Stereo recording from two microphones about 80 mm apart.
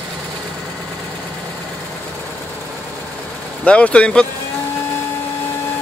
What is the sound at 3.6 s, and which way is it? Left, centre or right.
Speech, centre.